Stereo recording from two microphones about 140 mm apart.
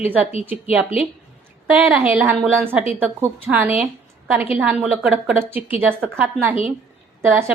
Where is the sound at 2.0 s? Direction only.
15° right (ahead or behind).